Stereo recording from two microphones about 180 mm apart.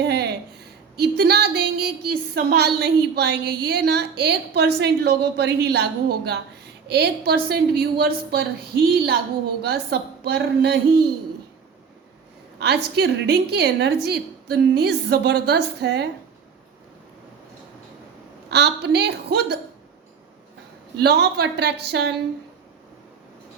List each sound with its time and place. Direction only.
0.0 s a sound: 65° right (ahead or behind)
0.9 s speech: 65° right (ahead or behind)
12.5 s a woman's voice: 65° right (ahead or behind)
18.4 s a woman's voice: 70° right (ahead or behind)
21.0 s a woman's voice: 65° right (ahead or behind)